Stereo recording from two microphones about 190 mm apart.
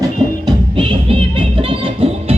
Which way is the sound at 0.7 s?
25° right (ahead or behind).